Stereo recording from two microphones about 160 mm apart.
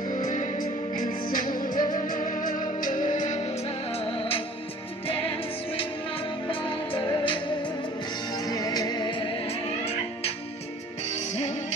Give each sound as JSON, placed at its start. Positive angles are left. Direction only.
{"t": 0.6, "sound": "music", "side_deg": 25}
{"t": 1.2, "sound": "music", "side_deg": 60}
{"t": 5.7, "sound": "music", "side_deg": 35}